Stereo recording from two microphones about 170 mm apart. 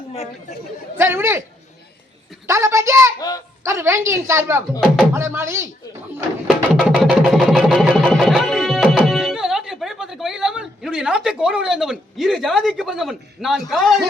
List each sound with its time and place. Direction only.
0.9 s a woman's voice: 15° right (ahead or behind)
2.5 s a woman's voice: 15° right (ahead or behind)
3.2 s speech: 20° left (ahead or behind)
3.6 s a woman's voice: 15° right (ahead or behind)
6.7 s music: centre (ahead or behind)